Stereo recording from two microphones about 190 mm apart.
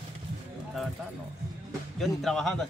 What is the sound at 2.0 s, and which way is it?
Speech, centre (ahead or behind).